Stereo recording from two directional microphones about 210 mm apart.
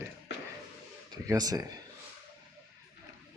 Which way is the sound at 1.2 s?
15° right (ahead or behind).